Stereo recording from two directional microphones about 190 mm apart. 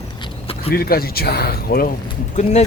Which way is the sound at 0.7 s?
50° left (ahead or behind).